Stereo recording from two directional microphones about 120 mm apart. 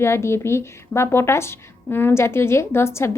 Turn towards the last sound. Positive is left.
turn(degrees=20)  # may be behind; listen again after turning